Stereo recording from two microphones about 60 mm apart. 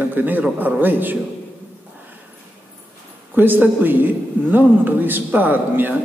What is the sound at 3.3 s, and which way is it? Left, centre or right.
A man's voice, right.